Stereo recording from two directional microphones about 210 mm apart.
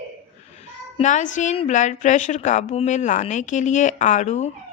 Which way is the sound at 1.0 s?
35° left (ahead or behind).